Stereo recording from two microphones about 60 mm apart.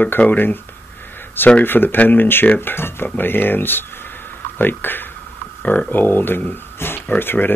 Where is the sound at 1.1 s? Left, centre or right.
Left.